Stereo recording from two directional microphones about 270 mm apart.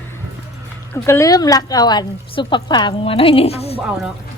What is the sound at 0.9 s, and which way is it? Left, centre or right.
A woman's voice, centre.